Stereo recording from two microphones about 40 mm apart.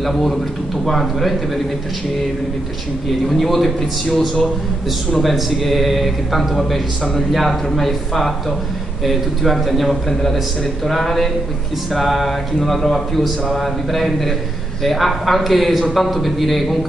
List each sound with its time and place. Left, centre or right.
0.0 s a man's voice: centre
3.1 s a man's voice: centre